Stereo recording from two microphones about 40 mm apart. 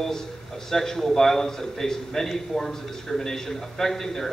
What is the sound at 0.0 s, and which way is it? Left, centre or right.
A man's voice, centre.